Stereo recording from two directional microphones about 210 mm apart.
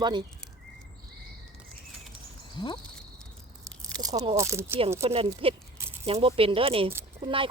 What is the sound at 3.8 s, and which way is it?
Speech, 15° right (ahead or behind).